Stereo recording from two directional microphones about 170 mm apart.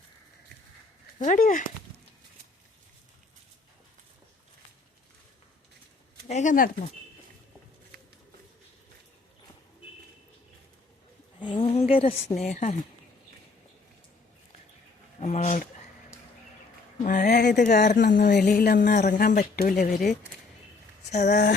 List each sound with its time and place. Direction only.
1.2 s speech: 50° left (ahead or behind)
6.2 s speech: 45° left (ahead or behind)
11.3 s a woman's voice: 30° left (ahead or behind)
12.3 s speech: 45° left (ahead or behind)
15.2 s speech: 40° left (ahead or behind)
17.0 s speech: 50° left (ahead or behind)
17.4 s speech: 75° left (ahead or behind)
18.3 s a sound: 70° left (ahead or behind)
19.1 s speech: 50° left (ahead or behind)